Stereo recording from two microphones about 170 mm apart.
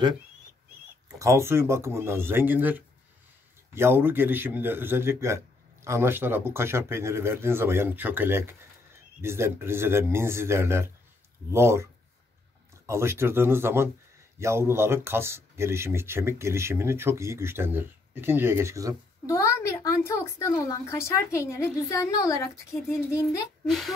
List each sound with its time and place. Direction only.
1.2 s a man's voice: 15° right (ahead or behind)
19.2 s speech: 15° left (ahead or behind)
23.6 s speech: centre (ahead or behind)